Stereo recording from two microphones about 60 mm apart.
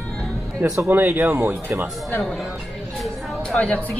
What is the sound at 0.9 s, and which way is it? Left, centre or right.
Speech, right.